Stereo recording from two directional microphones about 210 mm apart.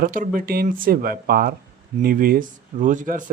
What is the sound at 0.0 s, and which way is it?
Speech, 40° right (ahead or behind).